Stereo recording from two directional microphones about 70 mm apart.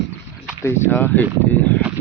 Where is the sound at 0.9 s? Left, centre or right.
Left.